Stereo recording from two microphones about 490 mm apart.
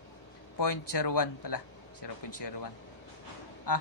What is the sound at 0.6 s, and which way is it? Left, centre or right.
Speech, left.